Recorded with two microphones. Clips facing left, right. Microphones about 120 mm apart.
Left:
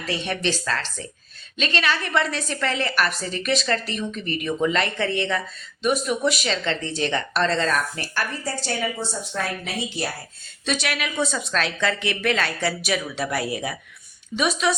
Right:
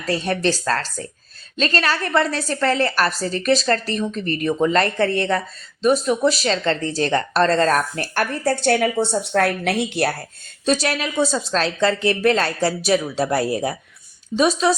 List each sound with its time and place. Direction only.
0.0 s a woman's voice: 40° right (ahead or behind); by 10.2 s 65° right (ahead or behind)
10.7 s a woman's voice: 35° right (ahead or behind)